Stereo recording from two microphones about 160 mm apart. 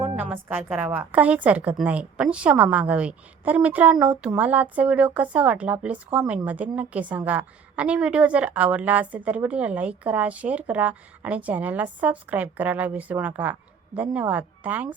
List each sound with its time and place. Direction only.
0.2 s a woman's voice: 10° right (ahead or behind)